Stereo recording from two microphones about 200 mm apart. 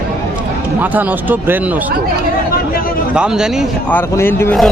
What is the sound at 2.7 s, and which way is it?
Chatter, 45° left (ahead or behind).